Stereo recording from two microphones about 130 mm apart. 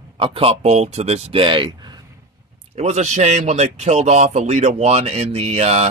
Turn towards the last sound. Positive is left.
turn(degrees=-55)  # may be behind; listen again after turning